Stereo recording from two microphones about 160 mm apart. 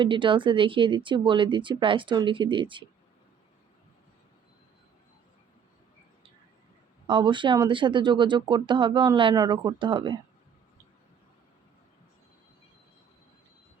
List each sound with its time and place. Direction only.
0.0 s speech: 30° right (ahead or behind)
7.1 s speech: 30° right (ahead or behind)